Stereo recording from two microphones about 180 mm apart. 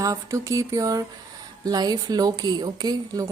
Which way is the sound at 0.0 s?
20° right (ahead or behind).